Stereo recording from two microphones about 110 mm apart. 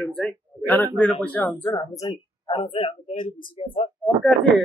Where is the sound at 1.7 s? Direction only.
35° left (ahead or behind).